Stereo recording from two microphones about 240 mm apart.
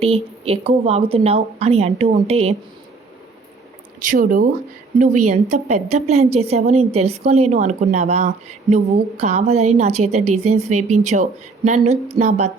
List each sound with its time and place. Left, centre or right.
0.0 s a woman's voice: right
4.1 s a woman's voice: right